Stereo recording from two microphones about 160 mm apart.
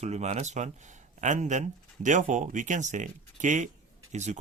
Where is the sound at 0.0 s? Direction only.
45° right (ahead or behind).